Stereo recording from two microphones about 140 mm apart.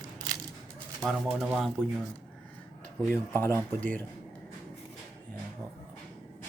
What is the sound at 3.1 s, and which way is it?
Speech, 15° left (ahead or behind).